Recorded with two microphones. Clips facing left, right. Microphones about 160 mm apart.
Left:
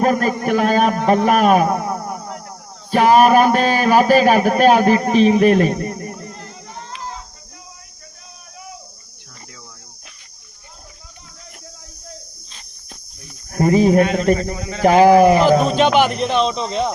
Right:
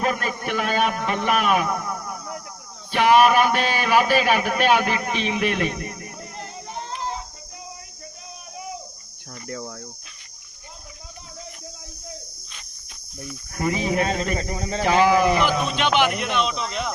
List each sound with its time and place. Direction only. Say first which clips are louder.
0.0 s a man's voice: left 8 dB; 40° left (ahead or behind)
6.2 s a sound: left 1 dB; 20° right (ahead or behind)
9.5 s cricket: right 14 dB; 50° right (ahead or behind)
12.5 s cricket: left 4 dB; 35° left (ahead or behind)
13.5 s speech: left 10 dB; 40° left (ahead or behind)
14.0 s a man's voice: left 8 dB; 35° right (ahead or behind)
14.8 s speech: left 8 dB; 45° left (ahead or behind)